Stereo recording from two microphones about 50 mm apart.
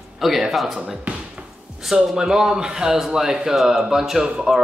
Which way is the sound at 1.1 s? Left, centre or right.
Right.